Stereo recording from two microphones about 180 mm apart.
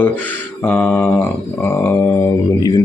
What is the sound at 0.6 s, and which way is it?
A man's voice, 10° left (ahead or behind).